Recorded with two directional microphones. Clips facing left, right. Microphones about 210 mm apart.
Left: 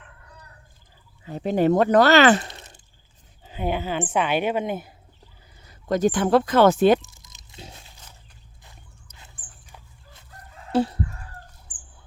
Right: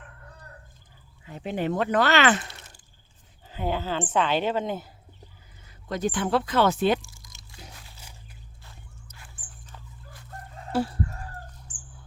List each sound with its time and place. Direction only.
1.2 s speech: 35° left (ahead or behind)
2.5 s a sound: 20° left (ahead or behind)
3.4 s a woman's voice: 15° left (ahead or behind)
5.6 s speech: 45° left (ahead or behind)
7.0 s a sound: 20° left (ahead or behind)
9.1 s dog: 15° left (ahead or behind)